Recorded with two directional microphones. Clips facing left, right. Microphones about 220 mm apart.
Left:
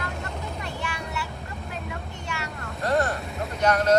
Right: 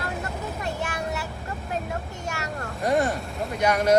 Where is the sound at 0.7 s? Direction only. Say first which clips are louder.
Right 4 dB; 45° right (ahead or behind).